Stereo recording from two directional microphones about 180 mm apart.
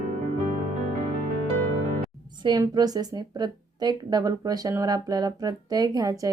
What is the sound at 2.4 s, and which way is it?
A woman's voice, 25° right (ahead or behind).